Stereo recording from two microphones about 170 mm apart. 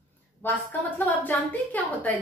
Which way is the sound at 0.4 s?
10° left (ahead or behind).